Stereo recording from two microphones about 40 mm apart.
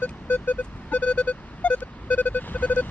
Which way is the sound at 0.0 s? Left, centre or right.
Left.